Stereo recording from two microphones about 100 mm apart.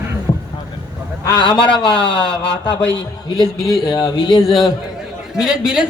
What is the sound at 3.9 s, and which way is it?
Speech, 45° left (ahead or behind).